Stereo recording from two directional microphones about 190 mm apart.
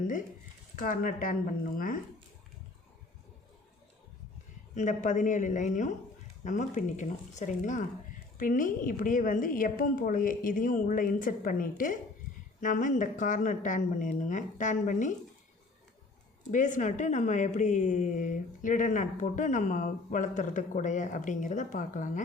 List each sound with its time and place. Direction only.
0.8 s a woman's voice: 45° left (ahead or behind)
4.7 s a woman's voice: 40° left (ahead or behind)
16.4 s speech: 40° left (ahead or behind)